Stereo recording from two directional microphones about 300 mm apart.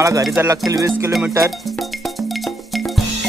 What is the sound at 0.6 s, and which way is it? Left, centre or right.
Music, centre.